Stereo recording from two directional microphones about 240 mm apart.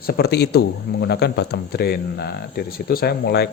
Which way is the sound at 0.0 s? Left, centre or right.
Left.